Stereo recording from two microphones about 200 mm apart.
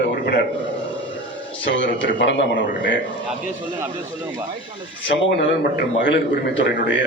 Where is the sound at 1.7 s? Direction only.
65° left (ahead or behind).